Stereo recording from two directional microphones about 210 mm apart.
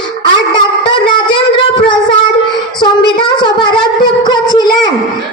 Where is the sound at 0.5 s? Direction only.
20° left (ahead or behind).